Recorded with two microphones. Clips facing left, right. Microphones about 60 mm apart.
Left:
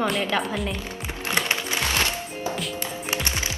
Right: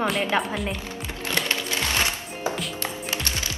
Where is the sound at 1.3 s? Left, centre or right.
Left.